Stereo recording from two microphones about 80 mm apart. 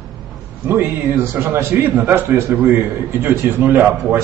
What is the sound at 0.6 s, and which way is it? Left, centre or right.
A man's voice, right.